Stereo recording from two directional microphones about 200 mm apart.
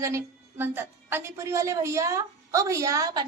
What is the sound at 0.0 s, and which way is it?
A woman's voice, 15° right (ahead or behind).